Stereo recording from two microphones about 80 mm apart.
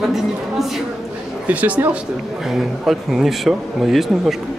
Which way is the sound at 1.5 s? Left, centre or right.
Centre.